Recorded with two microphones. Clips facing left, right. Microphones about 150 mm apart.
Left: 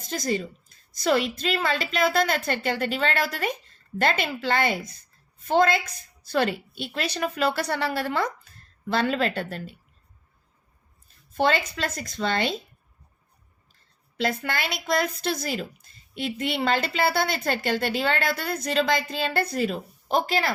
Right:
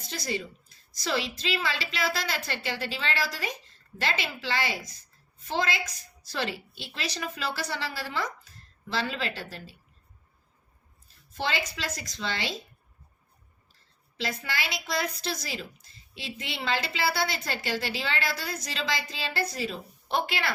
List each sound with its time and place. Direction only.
0.0 s a woman's voice: 45° left (ahead or behind)
11.3 s a woman's voice: 55° left (ahead or behind)
14.2 s a woman's voice: 55° left (ahead or behind)